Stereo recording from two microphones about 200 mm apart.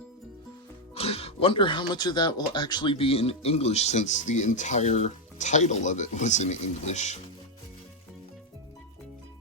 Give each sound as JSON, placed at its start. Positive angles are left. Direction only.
{"t": 0.9, "sound": "speech", "side_deg": 30}